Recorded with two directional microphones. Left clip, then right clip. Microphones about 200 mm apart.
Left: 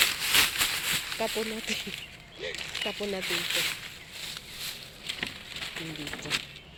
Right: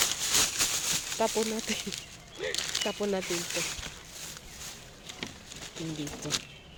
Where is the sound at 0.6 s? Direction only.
15° right (ahead or behind).